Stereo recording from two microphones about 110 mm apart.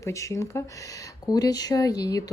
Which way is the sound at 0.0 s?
30° left (ahead or behind).